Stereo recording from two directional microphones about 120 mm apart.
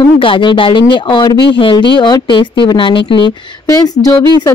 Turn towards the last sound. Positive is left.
turn(degrees=30)  # may be behind; listen again after turning